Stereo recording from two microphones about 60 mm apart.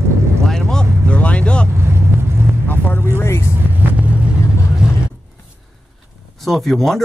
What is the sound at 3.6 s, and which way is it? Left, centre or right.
Vehicle, right.